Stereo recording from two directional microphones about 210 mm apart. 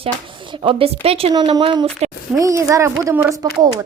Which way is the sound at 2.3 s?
15° right (ahead or behind).